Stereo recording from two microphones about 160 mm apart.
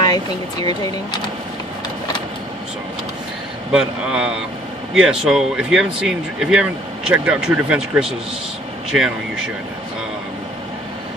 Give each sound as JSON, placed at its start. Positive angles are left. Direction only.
{"t": 0.0, "sound": "speech", "side_deg": 25}
{"t": 3.7, "sound": "speech", "side_deg": -5}